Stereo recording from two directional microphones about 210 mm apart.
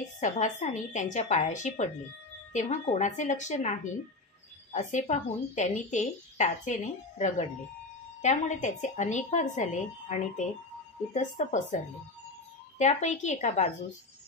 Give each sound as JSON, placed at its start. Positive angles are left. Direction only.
{"t": 0.2, "sound": "a woman's voice", "side_deg": 35}
{"t": 12.7, "sound": "a woman's voice", "side_deg": 35}